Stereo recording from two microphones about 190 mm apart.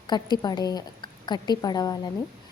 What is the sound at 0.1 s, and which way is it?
A woman's voice, 20° left (ahead or behind).